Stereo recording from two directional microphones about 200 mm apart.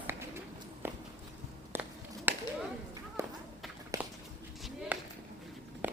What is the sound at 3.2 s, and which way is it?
Run, 15° right (ahead or behind).